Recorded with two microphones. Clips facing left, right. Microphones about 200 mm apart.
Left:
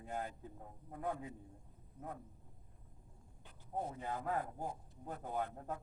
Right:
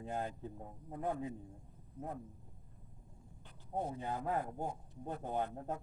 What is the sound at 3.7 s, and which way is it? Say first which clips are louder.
A man's voice: right 2 dB; 25° right (ahead or behind).